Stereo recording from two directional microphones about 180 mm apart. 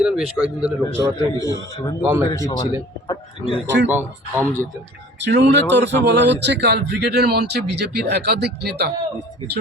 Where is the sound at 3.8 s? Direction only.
10° right (ahead or behind).